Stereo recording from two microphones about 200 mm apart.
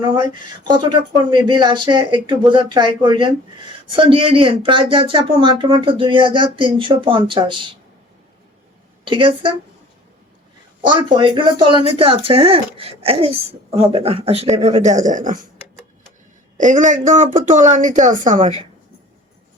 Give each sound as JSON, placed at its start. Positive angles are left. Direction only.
{"t": 0.0, "sound": "speech", "side_deg": -25}
{"t": 1.3, "sound": "speech", "side_deg": -25}
{"t": 9.0, "sound": "speech", "side_deg": -25}
{"t": 10.8, "sound": "speech", "side_deg": -25}
{"t": 16.6, "sound": "speech", "side_deg": -40}